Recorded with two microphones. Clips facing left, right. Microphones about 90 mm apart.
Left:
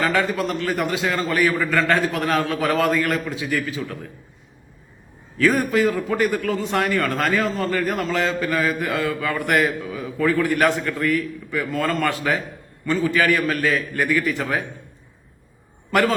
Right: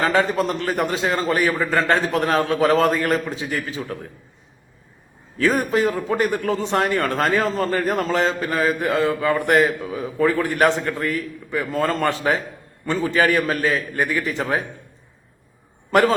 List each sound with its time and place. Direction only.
0.0 s a man's voice: 30° right (ahead or behind)
5.4 s a man's voice: 30° right (ahead or behind)
15.9 s a man's voice: 30° right (ahead or behind)